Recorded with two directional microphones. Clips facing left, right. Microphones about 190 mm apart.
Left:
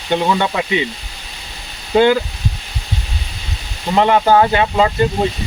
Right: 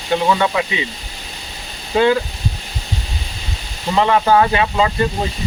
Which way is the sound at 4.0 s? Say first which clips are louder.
Left 2 dB; 25° left (ahead or behind).